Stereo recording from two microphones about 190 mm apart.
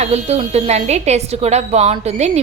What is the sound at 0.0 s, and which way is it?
A woman's voice, 35° right (ahead or behind).